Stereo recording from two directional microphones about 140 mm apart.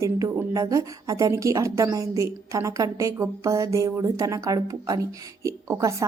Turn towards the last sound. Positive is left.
turn(degrees=-25)  # may be behind; listen again after turning